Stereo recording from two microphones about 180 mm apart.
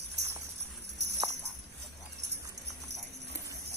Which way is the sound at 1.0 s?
65° right (ahead or behind).